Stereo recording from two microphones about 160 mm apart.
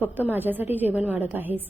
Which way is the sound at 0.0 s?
10° right (ahead or behind).